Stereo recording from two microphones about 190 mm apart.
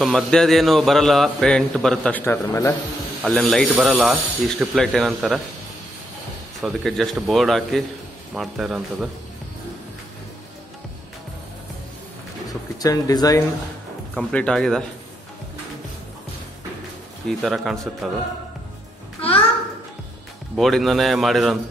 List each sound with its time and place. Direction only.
0.0 s a man's voice: 5° left (ahead or behind)
3.2 s a man's voice: centre (ahead or behind)
6.6 s a man's voice: centre (ahead or behind)
12.4 s speech: 20° left (ahead or behind)
14.1 s a man's voice: 5° left (ahead or behind)
17.3 s a man's voice: centre (ahead or behind)
19.2 s a sound: 30° left (ahead or behind)
20.5 s a man's voice: centre (ahead or behind)